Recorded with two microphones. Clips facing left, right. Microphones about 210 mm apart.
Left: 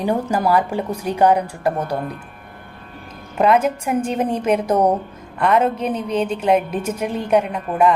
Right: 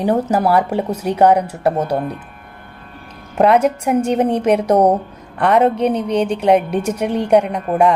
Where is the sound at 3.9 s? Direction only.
70° right (ahead or behind).